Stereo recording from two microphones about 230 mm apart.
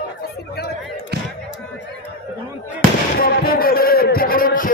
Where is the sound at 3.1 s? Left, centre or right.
Left.